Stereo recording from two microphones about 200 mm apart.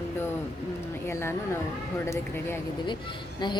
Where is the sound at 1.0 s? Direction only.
10° left (ahead or behind).